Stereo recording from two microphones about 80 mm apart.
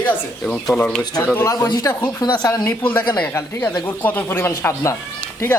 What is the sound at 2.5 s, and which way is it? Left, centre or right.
Speech, left.